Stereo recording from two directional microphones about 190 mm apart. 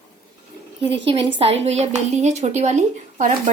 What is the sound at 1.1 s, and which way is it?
A woman's voice, 25° right (ahead or behind).